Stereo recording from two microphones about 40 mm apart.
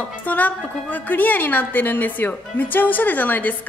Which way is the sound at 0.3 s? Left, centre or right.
Left.